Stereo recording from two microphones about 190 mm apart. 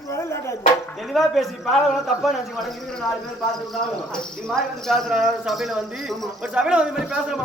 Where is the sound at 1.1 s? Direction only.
Centre (ahead or behind).